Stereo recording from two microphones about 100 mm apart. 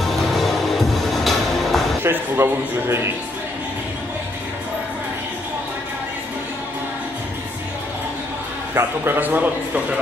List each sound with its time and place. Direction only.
0.0 s music: centre (ahead or behind)
2.0 s a man's voice: 25° right (ahead or behind)
8.7 s a man's voice: 20° right (ahead or behind)